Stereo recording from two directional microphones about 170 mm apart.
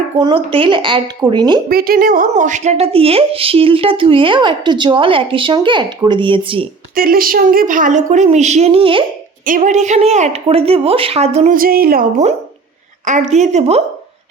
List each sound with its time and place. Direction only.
0.2 s a woman's voice: 30° right (ahead or behind)
1.7 s a woman's voice: 60° right (ahead or behind); by 6.7 s 30° right (ahead or behind)
6.9 s a woman's voice: 60° right (ahead or behind); by 9.0 s 30° right (ahead or behind)
9.5 s a woman's voice: 50° right (ahead or behind)
11.5 s speech: 60° right (ahead or behind)
13.3 s a woman's voice: 45° right (ahead or behind)